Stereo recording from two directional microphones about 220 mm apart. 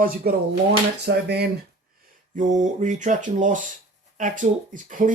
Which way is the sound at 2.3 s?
35° right (ahead or behind).